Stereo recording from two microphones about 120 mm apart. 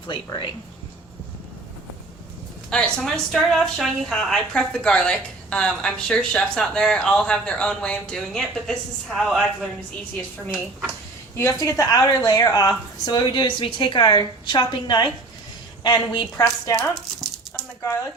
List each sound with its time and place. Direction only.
0.1 s speech: 40° left (ahead or behind)
2.6 s speech: 5° left (ahead or behind)
11.3 s speech: 25° left (ahead or behind)